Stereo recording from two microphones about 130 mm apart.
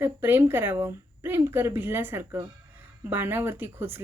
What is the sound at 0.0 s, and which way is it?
A woman's voice, 15° right (ahead or behind).